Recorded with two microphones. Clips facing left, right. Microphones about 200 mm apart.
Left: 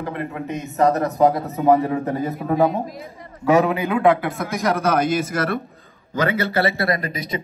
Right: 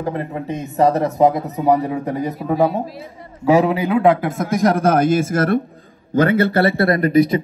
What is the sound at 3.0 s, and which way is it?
A man's voice, 30° right (ahead or behind).